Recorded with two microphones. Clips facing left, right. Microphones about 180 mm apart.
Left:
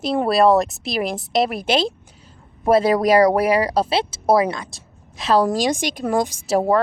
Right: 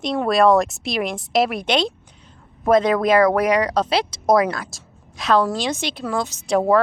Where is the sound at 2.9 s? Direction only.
35° left (ahead or behind).